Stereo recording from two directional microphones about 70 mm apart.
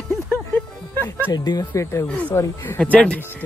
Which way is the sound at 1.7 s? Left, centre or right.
Left.